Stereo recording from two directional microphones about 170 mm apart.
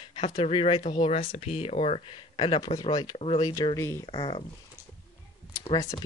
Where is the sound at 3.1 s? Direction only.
35° left (ahead or behind).